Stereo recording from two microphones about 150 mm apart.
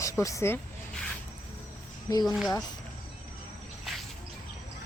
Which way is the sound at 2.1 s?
25° left (ahead or behind).